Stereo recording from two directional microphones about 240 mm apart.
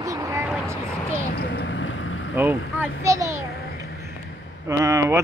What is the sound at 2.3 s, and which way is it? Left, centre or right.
A child's voice, centre.